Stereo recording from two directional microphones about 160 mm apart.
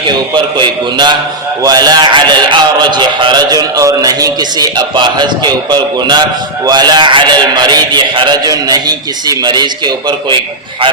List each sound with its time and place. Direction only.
0.3 s a man's voice: 30° right (ahead or behind)